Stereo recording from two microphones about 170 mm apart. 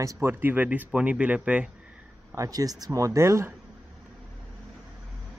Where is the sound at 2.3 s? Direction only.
20° right (ahead or behind).